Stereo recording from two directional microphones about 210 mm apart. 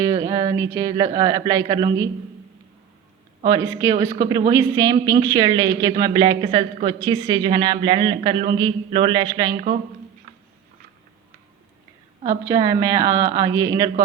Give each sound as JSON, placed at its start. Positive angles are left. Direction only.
{"t": 0.0, "sound": "speech", "side_deg": -15}
{"t": 3.4, "sound": "a woman's voice", "side_deg": -15}
{"t": 12.5, "sound": "speech", "side_deg": -20}